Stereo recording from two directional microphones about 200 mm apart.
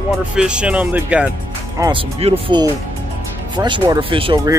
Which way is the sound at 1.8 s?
25° right (ahead or behind).